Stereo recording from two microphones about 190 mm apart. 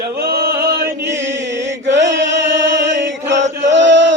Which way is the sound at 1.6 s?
70° right (ahead or behind).